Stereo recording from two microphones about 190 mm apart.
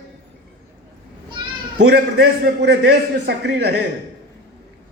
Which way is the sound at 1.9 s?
55° right (ahead or behind).